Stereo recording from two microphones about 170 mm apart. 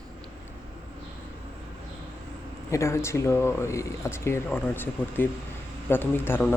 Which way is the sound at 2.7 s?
15° left (ahead or behind).